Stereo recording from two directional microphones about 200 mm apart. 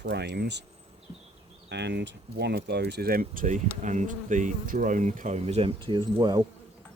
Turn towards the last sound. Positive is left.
turn(degrees=-20)  # may be behind; listen again after turning